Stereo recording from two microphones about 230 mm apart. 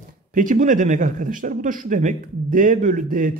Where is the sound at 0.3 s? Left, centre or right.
Right.